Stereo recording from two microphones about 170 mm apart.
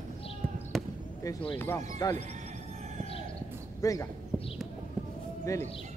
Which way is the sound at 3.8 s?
20° left (ahead or behind).